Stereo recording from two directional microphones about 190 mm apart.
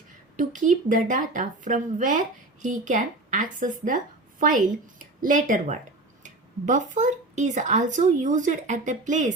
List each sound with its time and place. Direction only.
0.3 s a woman's voice: 40° right (ahead or behind)